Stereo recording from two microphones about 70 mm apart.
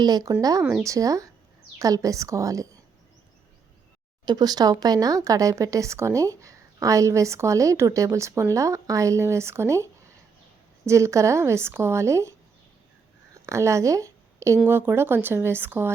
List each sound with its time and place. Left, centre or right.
0.0 s speech: right
0.9 s speech: right
4.3 s speech: right
10.8 s speech: right
13.3 s a sound: right
14.7 s speech: right